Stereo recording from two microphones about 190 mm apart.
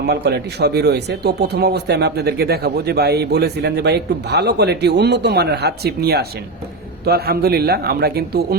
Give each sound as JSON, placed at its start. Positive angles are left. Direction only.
{"t": 0.1, "sound": "speech", "side_deg": -60}